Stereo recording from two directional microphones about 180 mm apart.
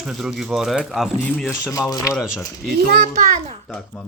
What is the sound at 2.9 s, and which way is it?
Speech, 55° right (ahead or behind).